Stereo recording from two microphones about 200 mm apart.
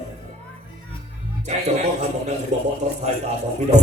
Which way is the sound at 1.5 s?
35° right (ahead or behind).